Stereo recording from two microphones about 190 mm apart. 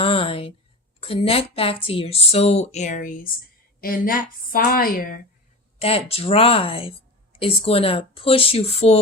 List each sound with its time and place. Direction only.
0.0 s speech: 30° left (ahead or behind); by 5.2 s 50° left (ahead or behind)
5.8 s speech: 30° left (ahead or behind)